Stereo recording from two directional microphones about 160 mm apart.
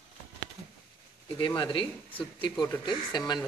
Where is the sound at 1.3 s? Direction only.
30° left (ahead or behind).